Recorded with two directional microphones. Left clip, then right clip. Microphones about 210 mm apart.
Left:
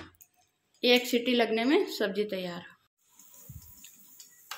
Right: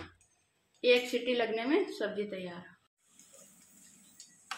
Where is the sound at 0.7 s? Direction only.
50° left (ahead or behind).